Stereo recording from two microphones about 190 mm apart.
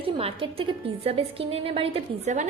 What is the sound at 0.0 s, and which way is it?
A woman's voice, 30° right (ahead or behind).